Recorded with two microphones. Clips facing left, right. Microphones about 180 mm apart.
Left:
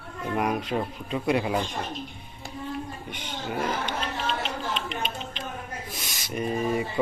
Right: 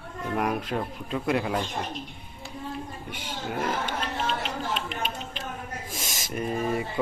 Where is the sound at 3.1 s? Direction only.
5° right (ahead or behind).